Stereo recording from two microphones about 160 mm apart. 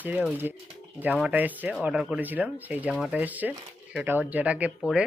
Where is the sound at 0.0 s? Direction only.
10° right (ahead or behind).